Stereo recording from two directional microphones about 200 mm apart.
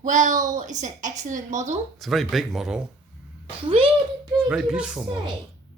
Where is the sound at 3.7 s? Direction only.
25° right (ahead or behind).